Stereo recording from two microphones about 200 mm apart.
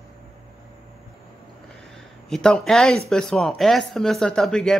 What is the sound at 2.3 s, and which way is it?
Speech, 5° left (ahead or behind).